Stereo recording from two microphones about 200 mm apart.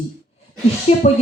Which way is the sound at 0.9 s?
30° left (ahead or behind).